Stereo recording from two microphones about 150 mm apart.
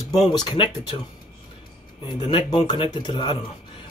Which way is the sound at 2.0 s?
30° left (ahead or behind).